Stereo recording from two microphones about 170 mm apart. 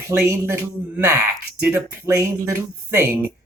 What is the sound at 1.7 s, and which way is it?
Speech, 15° right (ahead or behind).